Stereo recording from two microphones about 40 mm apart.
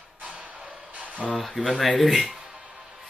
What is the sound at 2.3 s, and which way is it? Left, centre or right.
Music, centre.